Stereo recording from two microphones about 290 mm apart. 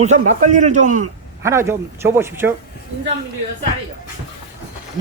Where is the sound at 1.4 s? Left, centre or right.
Centre.